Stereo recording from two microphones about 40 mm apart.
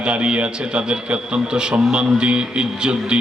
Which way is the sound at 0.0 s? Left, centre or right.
Right.